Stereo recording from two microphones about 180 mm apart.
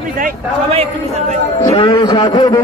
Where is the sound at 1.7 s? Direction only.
30° left (ahead or behind).